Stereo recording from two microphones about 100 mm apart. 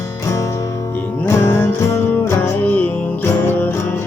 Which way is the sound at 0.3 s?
30° left (ahead or behind).